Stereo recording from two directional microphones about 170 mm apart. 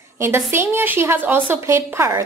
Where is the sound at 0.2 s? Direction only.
15° right (ahead or behind).